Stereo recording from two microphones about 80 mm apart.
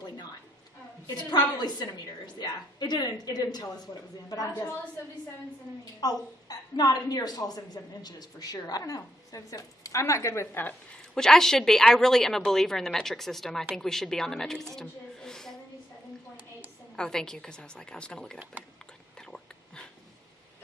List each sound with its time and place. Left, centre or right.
1.0 s a woman's voice: left
5.8 s a woman's voice: left
11.1 s a woman's voice: centre
16.9 s a woman's voice: centre
19.2 s a sound: centre